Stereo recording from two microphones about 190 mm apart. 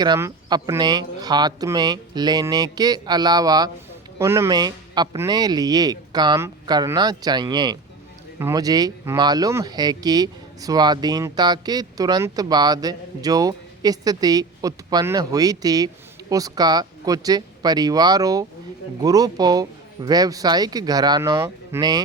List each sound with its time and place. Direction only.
0.0 s speech: 20° right (ahead or behind)